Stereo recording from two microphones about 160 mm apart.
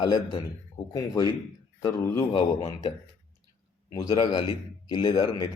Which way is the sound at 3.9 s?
25° left (ahead or behind).